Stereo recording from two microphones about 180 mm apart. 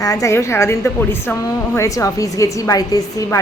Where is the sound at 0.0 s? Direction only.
20° left (ahead or behind).